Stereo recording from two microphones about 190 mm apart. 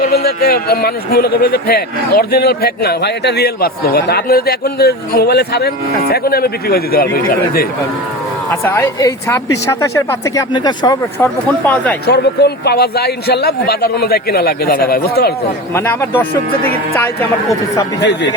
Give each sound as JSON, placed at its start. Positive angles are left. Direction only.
{"t": 0.0, "sound": "a man's voice", "side_deg": 55}
{"t": 8.6, "sound": "speech", "side_deg": 15}
{"t": 11.6, "sound": "speech", "side_deg": 10}
{"t": 12.0, "sound": "a man's voice", "side_deg": 60}
{"t": 15.7, "sound": "speech", "side_deg": 15}
{"t": 18.0, "sound": "a man's voice", "side_deg": 65}